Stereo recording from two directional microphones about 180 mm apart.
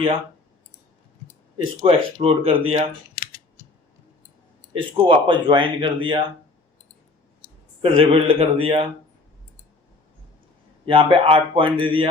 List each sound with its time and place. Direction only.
1.5 s speech: 30° right (ahead or behind)
4.7 s speech: 30° right (ahead or behind)
7.8 s speech: 30° right (ahead or behind)
10.8 s speech: 30° right (ahead or behind)